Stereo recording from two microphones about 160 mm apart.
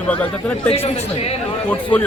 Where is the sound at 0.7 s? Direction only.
40° left (ahead or behind).